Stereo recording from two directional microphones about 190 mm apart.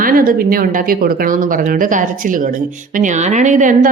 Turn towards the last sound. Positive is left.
turn(degrees=-40)  # may be behind; listen again after turning